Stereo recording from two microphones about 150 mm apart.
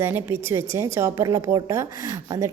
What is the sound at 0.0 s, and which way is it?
A woman's voice, 15° right (ahead or behind).